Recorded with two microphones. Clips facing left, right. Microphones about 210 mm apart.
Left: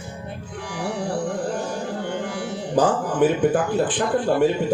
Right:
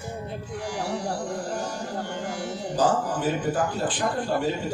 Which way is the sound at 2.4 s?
55° left (ahead or behind).